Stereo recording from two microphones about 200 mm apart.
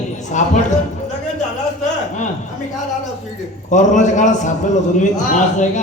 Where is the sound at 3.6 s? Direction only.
40° left (ahead or behind).